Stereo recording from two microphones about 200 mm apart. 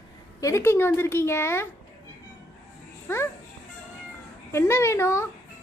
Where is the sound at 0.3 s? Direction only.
15° left (ahead or behind).